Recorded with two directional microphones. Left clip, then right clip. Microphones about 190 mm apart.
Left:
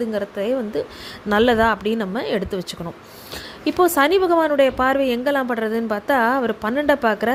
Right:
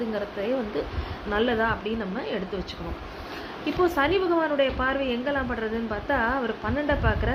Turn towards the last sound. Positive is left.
turn(degrees=50)  # may be behind; listen again after turning